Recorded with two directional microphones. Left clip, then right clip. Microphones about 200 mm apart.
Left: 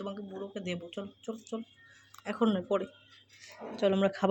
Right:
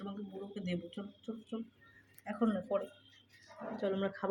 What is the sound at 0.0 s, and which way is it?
Speech, 35° left (ahead or behind).